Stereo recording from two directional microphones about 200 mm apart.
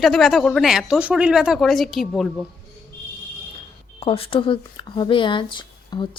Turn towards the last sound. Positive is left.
turn(degrees=25)  # may be behind; listen again after turning